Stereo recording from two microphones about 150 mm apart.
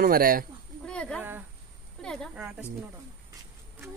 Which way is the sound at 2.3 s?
5° right (ahead or behind).